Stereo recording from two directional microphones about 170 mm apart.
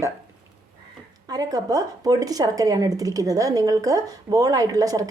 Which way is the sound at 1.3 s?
20° right (ahead or behind).